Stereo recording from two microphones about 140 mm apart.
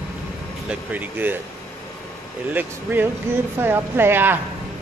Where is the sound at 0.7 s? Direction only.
10° right (ahead or behind).